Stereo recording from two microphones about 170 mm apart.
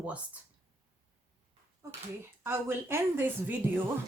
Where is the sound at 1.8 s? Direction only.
15° right (ahead or behind).